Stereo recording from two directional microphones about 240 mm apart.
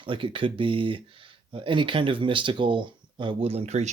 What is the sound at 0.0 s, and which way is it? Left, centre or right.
Speech, right.